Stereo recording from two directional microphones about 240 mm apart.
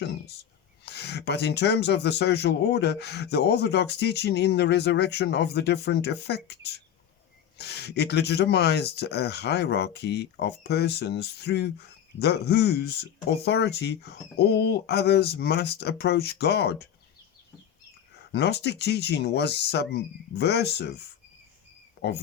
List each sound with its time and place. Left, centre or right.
0.0 s speech: left
18.3 s speech: left
22.0 s frog: left